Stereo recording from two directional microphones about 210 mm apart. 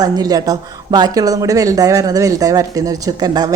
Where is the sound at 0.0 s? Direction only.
15° right (ahead or behind).